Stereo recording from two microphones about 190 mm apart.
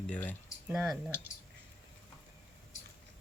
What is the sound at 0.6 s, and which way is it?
Speech, 5° right (ahead or behind).